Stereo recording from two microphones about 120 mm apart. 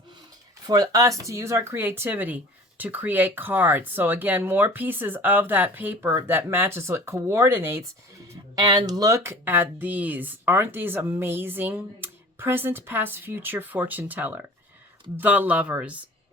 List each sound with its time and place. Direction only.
0.7 s speech: 30° right (ahead or behind)
8.5 s speech: 35° right (ahead or behind); by 16.0 s 10° right (ahead or behind)